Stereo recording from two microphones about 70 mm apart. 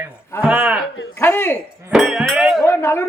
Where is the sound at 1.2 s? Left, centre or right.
Left.